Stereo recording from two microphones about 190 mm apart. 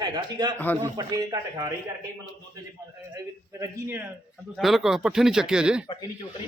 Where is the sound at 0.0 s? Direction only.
20° right (ahead or behind).